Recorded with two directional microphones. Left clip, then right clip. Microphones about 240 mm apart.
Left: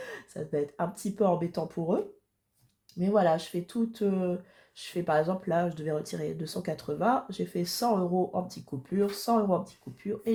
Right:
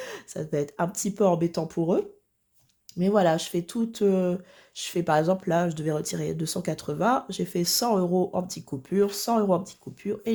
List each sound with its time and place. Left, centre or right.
0.0 s speech: right
3.0 s speech: right